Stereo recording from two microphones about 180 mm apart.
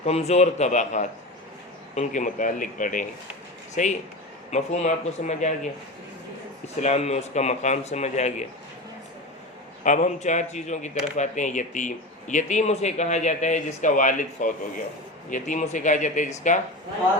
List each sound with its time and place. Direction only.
0.0 s speech: 35° left (ahead or behind)
6.8 s speech: 40° left (ahead or behind)
9.8 s speech: 45° left (ahead or behind)